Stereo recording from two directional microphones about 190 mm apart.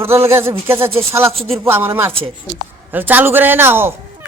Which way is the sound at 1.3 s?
30° right (ahead or behind).